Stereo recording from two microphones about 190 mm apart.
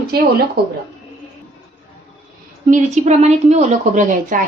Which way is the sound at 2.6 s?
40° right (ahead or behind).